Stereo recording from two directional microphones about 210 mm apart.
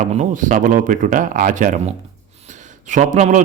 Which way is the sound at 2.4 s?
35° right (ahead or behind).